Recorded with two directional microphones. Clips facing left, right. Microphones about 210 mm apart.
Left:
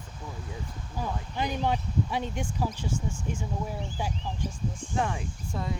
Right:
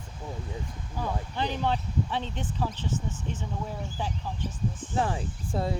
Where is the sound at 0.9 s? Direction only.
10° left (ahead or behind).